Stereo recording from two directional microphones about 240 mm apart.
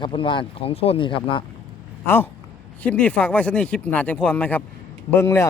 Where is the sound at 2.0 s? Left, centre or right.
Centre.